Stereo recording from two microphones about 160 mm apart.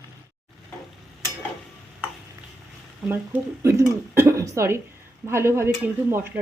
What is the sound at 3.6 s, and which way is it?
Speech, 15° right (ahead or behind).